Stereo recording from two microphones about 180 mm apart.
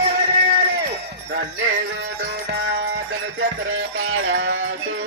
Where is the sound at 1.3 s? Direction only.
80° right.